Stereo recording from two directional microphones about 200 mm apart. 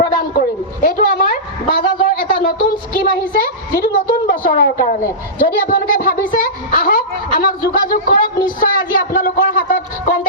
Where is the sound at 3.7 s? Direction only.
45° left (ahead or behind).